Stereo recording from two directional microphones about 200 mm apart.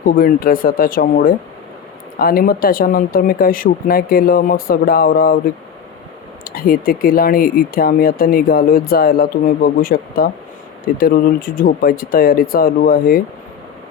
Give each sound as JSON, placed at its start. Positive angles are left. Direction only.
{"t": 0.0, "sound": "speech", "side_deg": 45}
{"t": 6.4, "sound": "speech", "side_deg": 45}